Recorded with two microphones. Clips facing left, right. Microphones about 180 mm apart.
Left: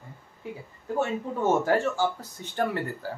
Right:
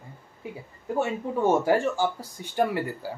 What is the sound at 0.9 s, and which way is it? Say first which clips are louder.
Speech: right 1 dB; 10° right (ahead or behind).